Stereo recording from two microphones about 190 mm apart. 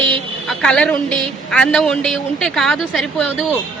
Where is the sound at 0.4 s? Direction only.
5° left (ahead or behind).